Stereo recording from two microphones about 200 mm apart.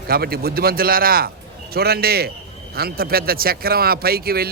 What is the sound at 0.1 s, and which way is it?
Speech, 50° right (ahead or behind).